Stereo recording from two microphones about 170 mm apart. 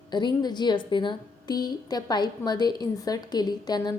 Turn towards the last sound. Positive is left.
turn(degrees=25)  # may be behind; listen again after turning